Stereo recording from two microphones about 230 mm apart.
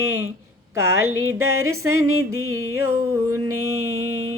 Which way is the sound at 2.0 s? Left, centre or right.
Right.